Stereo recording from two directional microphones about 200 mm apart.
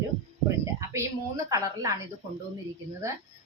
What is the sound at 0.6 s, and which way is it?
A woman's voice, 15° right (ahead or behind).